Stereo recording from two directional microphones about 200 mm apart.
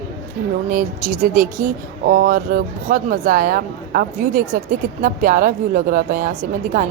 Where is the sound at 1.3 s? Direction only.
45° right (ahead or behind).